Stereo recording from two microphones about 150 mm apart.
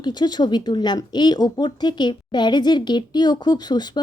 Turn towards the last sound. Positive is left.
turn(degrees=30)  # may be behind; listen again after turning